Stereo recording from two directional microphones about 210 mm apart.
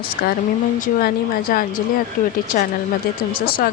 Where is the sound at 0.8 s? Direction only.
45° left (ahead or behind).